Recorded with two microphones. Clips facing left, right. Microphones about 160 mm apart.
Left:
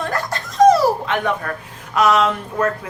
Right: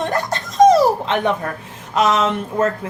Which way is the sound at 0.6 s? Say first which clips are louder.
Right 1 dB; 20° right (ahead or behind).